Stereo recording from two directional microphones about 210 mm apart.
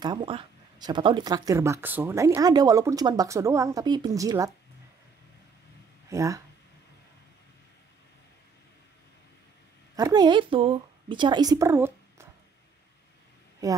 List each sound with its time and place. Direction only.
0.0 s speech: 20° right (ahead or behind)
6.0 s speech: 15° right (ahead or behind)
9.9 s a woman's voice: 20° right (ahead or behind)
13.6 s speech: 15° right (ahead or behind)